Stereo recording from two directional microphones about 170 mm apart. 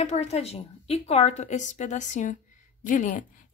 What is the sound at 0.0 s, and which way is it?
A woman's voice, 40° left (ahead or behind).